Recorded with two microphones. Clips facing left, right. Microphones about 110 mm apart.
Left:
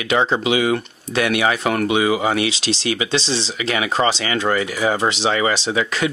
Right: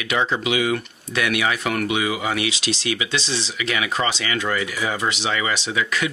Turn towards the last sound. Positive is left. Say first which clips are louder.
# left 3 dB
turn(degrees=30)  # may be behind; listen again after turning